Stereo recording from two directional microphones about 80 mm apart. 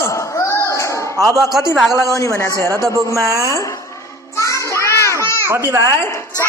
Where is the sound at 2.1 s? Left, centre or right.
Left.